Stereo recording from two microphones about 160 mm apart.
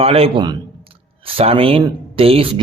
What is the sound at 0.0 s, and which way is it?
A man's voice, 35° right (ahead or behind).